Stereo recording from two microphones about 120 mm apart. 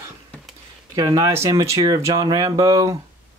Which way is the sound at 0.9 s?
30° right (ahead or behind).